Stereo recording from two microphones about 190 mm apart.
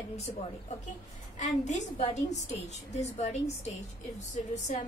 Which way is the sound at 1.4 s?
40° left (ahead or behind).